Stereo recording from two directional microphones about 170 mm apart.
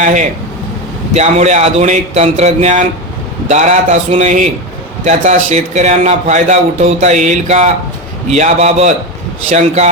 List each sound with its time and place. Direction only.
0.0 s a man's voice: 45° right (ahead or behind)